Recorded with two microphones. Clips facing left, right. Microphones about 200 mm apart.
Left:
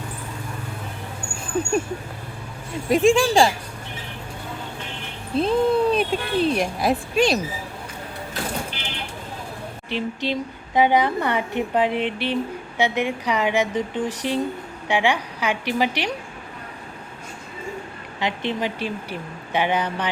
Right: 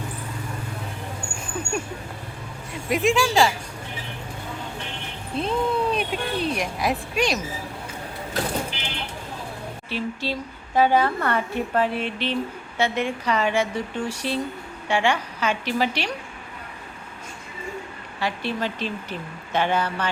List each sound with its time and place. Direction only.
2.9 s speech: 30° left (ahead or behind)
5.4 s speech: 35° left (ahead or behind)
9.9 s a woman's voice: 20° left (ahead or behind)
18.2 s a woman's voice: 20° left (ahead or behind)